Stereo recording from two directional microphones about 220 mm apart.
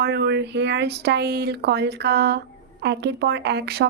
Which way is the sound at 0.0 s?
50° right (ahead or behind).